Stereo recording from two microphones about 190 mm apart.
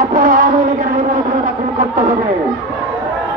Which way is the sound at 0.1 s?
45° right (ahead or behind).